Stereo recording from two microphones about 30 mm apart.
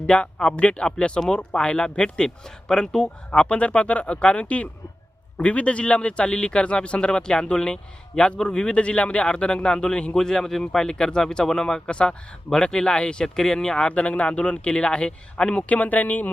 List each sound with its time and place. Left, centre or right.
0.0 s speech: left
0.5 s a man's voice: left
3.3 s a man's voice: left
10.2 s a man's voice: centre
13.2 s speech: centre
13.8 s speech: left
14.7 s a man's voice: left
15.5 s speech: left